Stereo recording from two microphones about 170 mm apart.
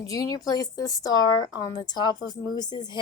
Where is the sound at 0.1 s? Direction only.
20° left (ahead or behind).